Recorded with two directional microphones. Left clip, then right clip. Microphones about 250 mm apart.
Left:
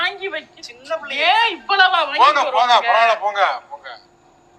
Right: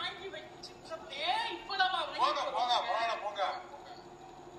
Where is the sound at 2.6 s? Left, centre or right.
Left.